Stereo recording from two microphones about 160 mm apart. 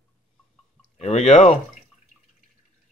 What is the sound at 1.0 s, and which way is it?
Speech, 45° left (ahead or behind).